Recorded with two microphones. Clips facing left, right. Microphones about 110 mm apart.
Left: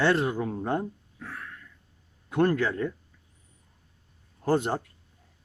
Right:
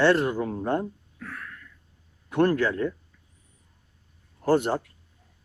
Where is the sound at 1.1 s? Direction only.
25° left (ahead or behind).